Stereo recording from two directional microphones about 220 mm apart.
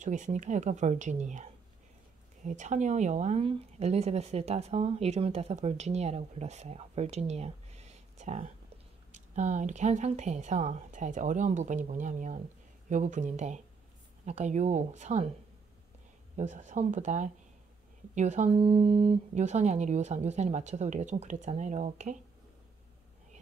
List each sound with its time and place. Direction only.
0.0 s speech: 35° right (ahead or behind)
16.3 s speech: 35° right (ahead or behind)